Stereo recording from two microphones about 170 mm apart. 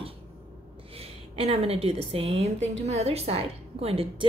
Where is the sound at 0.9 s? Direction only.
35° right (ahead or behind).